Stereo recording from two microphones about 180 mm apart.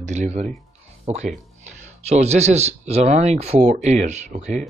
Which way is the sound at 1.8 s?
40° right (ahead or behind).